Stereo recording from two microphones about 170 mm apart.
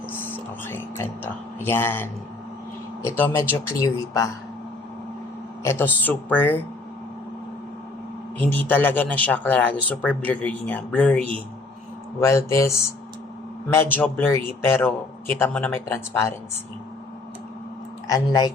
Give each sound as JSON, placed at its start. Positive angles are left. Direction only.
{"t": 0.1, "sound": "speech", "side_deg": 10}
{"t": 5.6, "sound": "speech", "side_deg": 10}
{"t": 8.4, "sound": "speech", "side_deg": 10}
{"t": 13.7, "sound": "speech", "side_deg": 10}
{"t": 18.1, "sound": "speech", "side_deg": 20}